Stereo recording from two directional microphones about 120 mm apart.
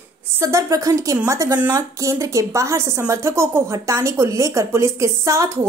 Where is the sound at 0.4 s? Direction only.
25° right (ahead or behind).